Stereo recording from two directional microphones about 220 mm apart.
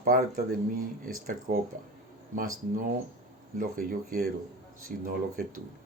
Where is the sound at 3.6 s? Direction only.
40° right (ahead or behind).